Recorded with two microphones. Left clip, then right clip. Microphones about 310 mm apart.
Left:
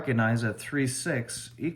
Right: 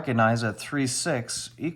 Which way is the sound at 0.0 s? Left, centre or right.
Centre.